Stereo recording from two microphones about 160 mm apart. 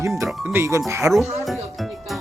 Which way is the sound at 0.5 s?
20° right (ahead or behind).